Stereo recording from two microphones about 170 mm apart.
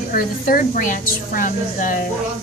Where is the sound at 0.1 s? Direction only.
55° left (ahead or behind).